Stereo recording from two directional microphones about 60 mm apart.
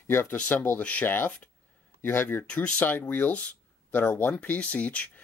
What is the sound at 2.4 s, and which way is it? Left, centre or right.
Speech, centre.